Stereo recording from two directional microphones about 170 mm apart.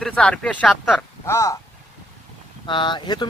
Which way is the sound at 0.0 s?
5° left (ahead or behind).